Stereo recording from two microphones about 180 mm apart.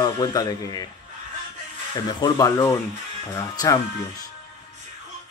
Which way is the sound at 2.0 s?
20° left (ahead or behind).